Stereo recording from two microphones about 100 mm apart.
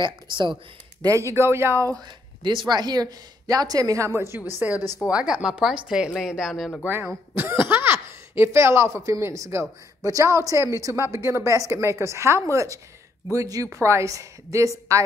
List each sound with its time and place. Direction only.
0.0 s speech: 55° right (ahead or behind)
1.0 s speech: 30° right (ahead or behind)
2.0 s speech: 50° right (ahead or behind); by 4.1 s 35° right (ahead or behind)
4.6 s speech: 15° right (ahead or behind)
7.3 s speech: 25° right (ahead or behind)